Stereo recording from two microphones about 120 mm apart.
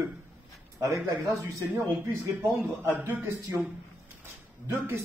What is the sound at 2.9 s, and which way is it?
Speech, 20° right (ahead or behind).